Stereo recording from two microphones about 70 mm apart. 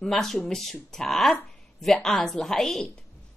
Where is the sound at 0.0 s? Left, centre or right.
Centre.